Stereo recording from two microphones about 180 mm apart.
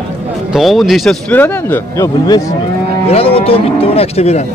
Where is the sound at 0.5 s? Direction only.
Centre (ahead or behind); by 2.4 s 20° left (ahead or behind).